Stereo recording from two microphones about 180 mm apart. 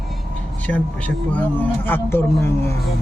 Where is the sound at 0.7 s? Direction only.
10° left (ahead or behind).